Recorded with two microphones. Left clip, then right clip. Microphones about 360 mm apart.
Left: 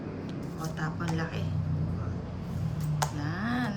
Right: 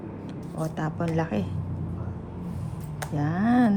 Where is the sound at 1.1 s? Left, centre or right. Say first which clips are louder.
Right 7 dB; centre.